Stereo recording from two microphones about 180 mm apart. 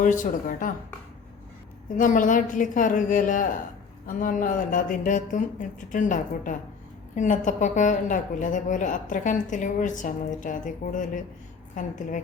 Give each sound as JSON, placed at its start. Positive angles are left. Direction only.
{"t": 0.0, "sound": "a woman's voice", "side_deg": 45}
{"t": 2.0, "sound": "a woman's voice", "side_deg": 45}